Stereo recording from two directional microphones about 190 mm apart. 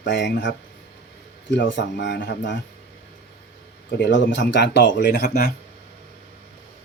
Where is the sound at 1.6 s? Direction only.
70° left (ahead or behind).